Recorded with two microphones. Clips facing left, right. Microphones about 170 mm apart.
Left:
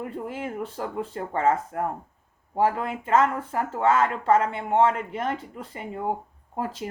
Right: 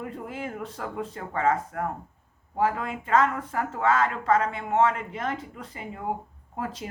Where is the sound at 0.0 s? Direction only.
30° left (ahead or behind).